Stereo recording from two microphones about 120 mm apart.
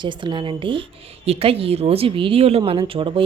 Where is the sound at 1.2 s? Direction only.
55° right (ahead or behind).